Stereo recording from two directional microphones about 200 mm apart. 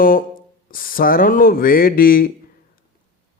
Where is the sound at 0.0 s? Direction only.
45° left (ahead or behind).